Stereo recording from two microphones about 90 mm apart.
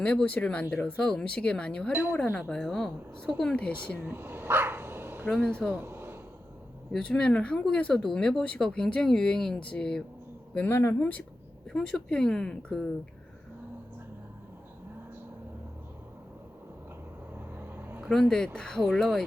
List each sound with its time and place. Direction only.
0.0 s speech: 15° left (ahead or behind)
1.9 s speech: 25° right (ahead or behind)
2.5 s a woman's voice: 5° left (ahead or behind)
3.9 s dog: 25° right (ahead or behind)
5.7 s a sound: 25° right (ahead or behind)
6.9 s speech: 10° left (ahead or behind)
10.5 s speech: 20° left (ahead or behind)
11.7 s speech: 5° left (ahead or behind)
17.5 s vehicle: 25° right (ahead or behind)
18.1 s speech: 5° left (ahead or behind)